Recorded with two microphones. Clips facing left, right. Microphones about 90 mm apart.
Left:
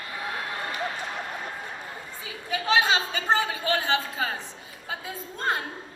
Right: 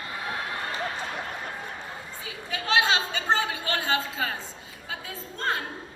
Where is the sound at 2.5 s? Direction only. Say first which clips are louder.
Left 1 dB; 20° left (ahead or behind).